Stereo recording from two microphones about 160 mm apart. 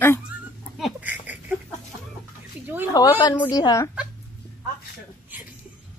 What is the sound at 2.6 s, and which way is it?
Speech, 10° right (ahead or behind).